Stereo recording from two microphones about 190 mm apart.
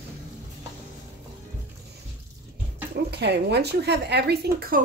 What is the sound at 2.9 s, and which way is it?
Speech, 60° right (ahead or behind).